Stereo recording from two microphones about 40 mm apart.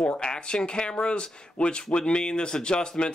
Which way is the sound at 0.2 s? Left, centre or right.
Left.